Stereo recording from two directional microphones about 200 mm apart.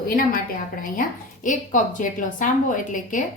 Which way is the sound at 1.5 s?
40° left (ahead or behind).